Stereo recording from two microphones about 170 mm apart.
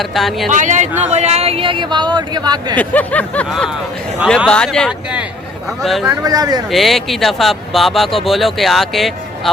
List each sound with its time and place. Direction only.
0.0 s speech: centre (ahead or behind)
0.5 s speech: 45° right (ahead or behind); by 2.7 s 25° right (ahead or behind)
2.7 s a sound: 10° left (ahead or behind)
4.4 s speech: 5° left (ahead or behind)
6.2 s speech: 20° right (ahead or behind)
6.7 s speech: centre (ahead or behind)